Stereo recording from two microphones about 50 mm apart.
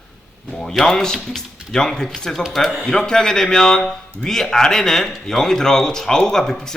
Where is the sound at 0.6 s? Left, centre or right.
Centre.